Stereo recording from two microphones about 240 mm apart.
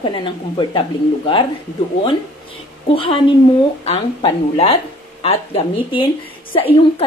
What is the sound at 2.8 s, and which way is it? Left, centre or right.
A woman's voice, left.